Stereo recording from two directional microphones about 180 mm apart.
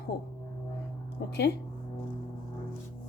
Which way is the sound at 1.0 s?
65° left (ahead or behind).